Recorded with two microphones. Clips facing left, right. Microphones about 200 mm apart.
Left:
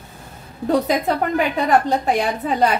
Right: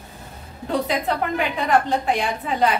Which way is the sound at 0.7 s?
40° left (ahead or behind).